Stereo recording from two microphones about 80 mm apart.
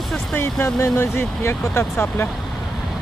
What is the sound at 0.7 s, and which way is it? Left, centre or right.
Speech, left.